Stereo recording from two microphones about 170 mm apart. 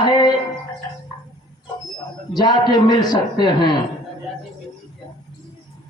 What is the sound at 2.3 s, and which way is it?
Speech, 25° left (ahead or behind).